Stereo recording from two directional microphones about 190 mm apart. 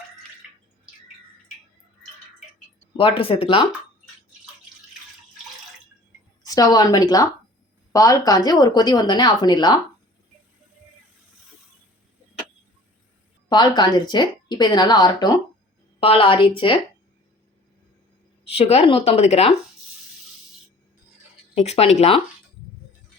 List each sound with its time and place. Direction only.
3.0 s speech: 30° left (ahead or behind)
6.4 s speech: 20° left (ahead or behind)
13.5 s speech: 25° left (ahead or behind)
18.4 s speech: 30° left (ahead or behind)
21.5 s speech: 35° left (ahead or behind)